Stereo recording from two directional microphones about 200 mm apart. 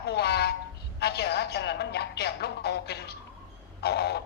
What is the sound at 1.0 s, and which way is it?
A woman's voice, 55° left (ahead or behind).